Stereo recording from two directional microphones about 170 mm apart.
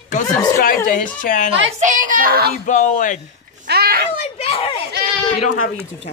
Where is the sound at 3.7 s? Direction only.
65° right (ahead or behind).